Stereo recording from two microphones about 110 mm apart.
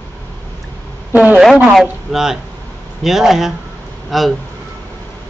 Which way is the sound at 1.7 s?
5° right (ahead or behind).